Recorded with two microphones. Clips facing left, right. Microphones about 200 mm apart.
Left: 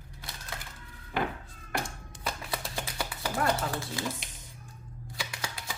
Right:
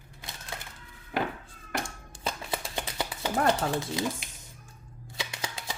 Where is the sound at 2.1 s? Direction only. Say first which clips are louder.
Right 3 dB; 25° right (ahead or behind).